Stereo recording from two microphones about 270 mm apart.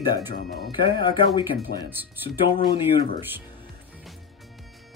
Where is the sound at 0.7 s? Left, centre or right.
Centre.